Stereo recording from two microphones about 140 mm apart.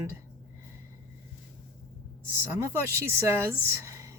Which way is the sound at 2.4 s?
15° right (ahead or behind).